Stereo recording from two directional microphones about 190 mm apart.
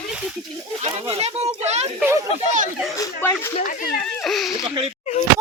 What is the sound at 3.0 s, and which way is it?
Speech, 15° left (ahead or behind).